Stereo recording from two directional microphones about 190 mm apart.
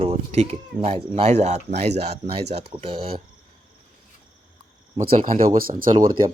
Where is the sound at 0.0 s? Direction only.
30° right (ahead or behind).